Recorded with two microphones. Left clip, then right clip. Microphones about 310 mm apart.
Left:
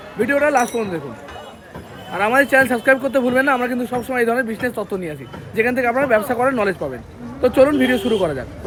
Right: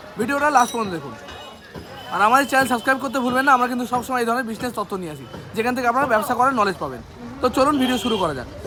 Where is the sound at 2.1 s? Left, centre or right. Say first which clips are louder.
Left 2 dB; centre.